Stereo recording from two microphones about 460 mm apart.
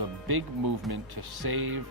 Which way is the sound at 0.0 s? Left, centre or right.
Right.